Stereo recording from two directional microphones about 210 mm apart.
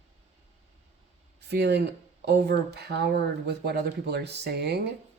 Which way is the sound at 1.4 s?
50° right (ahead or behind).